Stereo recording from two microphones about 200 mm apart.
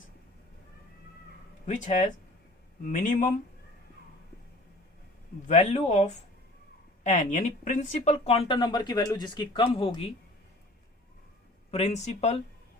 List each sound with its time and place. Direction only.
1.6 s speech: 40° left (ahead or behind)
5.5 s speech: 35° left (ahead or behind)
11.7 s speech: 35° left (ahead or behind)